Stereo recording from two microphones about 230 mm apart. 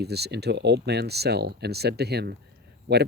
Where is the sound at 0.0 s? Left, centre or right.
Right.